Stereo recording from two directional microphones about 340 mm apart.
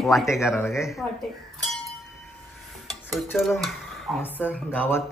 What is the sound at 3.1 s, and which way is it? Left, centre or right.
Speech, centre.